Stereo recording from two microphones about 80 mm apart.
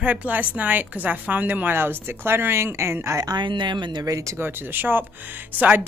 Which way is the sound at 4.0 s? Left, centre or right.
Right.